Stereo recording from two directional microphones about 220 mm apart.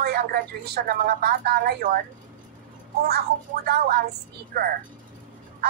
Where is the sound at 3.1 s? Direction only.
45° right (ahead or behind).